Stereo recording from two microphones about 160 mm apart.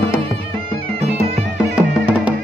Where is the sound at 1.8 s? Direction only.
5° right (ahead or behind).